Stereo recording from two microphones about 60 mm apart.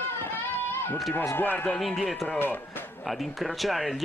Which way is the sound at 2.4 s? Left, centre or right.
Left.